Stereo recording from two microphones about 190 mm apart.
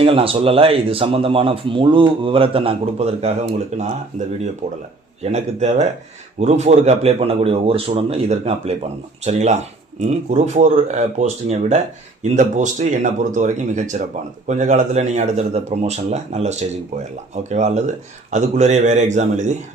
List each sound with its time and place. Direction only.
0.0 s a man's voice: 30° right (ahead or behind)
5.2 s a man's voice: 35° right (ahead or behind)